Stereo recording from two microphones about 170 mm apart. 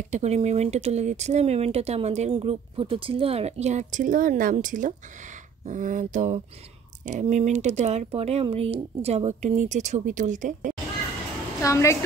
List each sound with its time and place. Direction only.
0.1 s speech: 40° right (ahead or behind)
11.6 s a woman's voice: 15° left (ahead or behind)